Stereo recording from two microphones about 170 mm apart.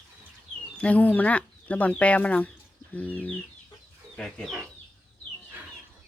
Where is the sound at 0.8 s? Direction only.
10° left (ahead or behind).